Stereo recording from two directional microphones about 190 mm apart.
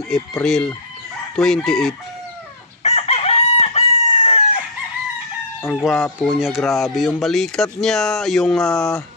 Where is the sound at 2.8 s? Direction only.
35° left (ahead or behind).